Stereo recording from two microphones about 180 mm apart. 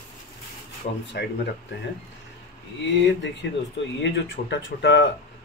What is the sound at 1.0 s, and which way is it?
Speech, 70° left (ahead or behind).